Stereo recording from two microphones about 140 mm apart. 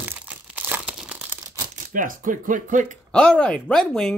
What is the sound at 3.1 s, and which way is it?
Speech, 5° left (ahead or behind).